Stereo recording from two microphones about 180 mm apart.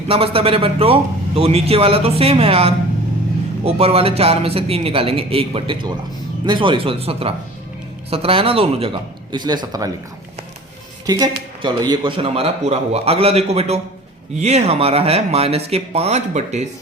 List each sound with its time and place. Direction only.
0.1 s a man's voice: 30° right (ahead or behind)
11.0 s a man's voice: 20° right (ahead or behind); by 16.6 s 40° right (ahead or behind)